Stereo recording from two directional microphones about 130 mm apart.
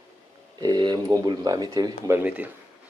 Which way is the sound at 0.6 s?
30° right (ahead or behind).